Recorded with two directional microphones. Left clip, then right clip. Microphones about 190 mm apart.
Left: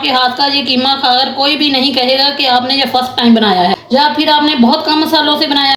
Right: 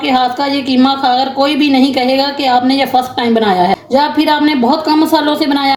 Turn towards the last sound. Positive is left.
turn(degrees=-45)  # may be behind; listen again after turning